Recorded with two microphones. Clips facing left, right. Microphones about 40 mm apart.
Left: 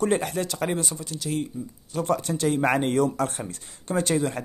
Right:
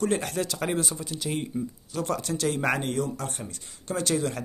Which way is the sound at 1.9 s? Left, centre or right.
Centre.